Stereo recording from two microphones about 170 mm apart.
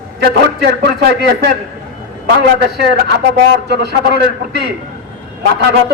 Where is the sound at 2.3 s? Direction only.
70° right (ahead or behind).